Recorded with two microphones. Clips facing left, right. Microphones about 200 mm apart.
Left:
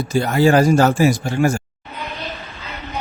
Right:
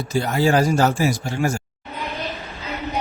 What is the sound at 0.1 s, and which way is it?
Speech, 60° left (ahead or behind).